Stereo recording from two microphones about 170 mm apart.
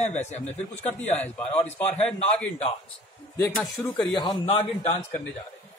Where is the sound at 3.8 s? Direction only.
Centre (ahead or behind).